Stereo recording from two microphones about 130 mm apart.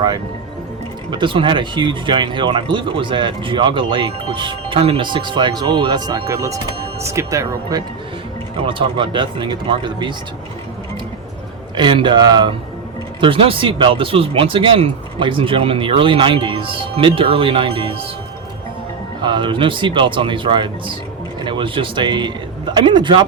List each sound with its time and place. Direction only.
1.1 s speech: 40° right (ahead or behind)
8.5 s speech: 40° right (ahead or behind)
11.8 s speech: 40° right (ahead or behind)
19.2 s speech: 40° right (ahead or behind)